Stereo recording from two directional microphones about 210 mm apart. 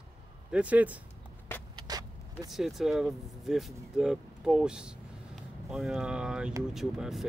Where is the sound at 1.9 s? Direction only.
20° right (ahead or behind).